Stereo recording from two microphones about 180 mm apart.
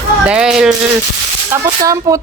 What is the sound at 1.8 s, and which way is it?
Speech, 20° right (ahead or behind).